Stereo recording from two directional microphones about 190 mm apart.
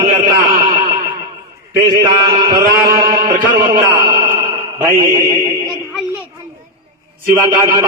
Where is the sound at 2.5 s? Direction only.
20° right (ahead or behind).